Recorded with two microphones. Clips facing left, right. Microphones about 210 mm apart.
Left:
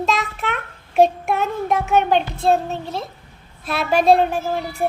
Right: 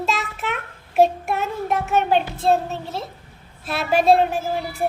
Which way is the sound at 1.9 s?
5° right (ahead or behind).